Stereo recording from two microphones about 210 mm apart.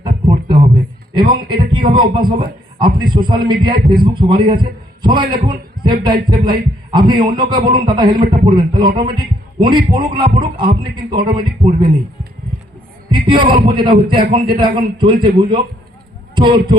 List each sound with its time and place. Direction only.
0.0 s a sound: 20° right (ahead or behind)
1.3 s a man's voice: 20° right (ahead or behind)
13.1 s a man's voice: 20° right (ahead or behind)